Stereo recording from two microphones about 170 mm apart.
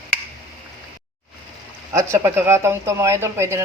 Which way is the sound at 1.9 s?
15° right (ahead or behind).